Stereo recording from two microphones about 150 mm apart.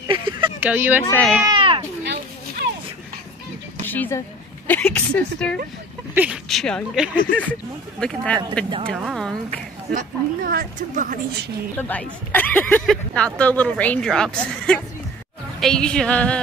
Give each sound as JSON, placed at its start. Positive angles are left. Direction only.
{"t": 0.1, "sound": "a sound", "side_deg": -35}
{"t": 0.6, "sound": "speech", "side_deg": -10}
{"t": 1.5, "sound": "cat", "side_deg": -35}
{"t": 3.8, "sound": "a sound", "side_deg": 10}
{"t": 4.6, "sound": "a woman's voice", "side_deg": 10}
{"t": 6.1, "sound": "speech", "side_deg": -5}
{"t": 9.8, "sound": "a woman's voice", "side_deg": -65}
{"t": 11.7, "sound": "speech", "side_deg": 10}